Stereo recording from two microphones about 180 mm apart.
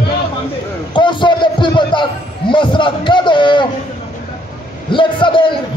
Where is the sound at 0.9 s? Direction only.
25° left (ahead or behind).